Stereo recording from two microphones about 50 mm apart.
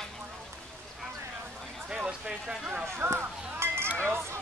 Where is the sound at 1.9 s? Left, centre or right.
Centre.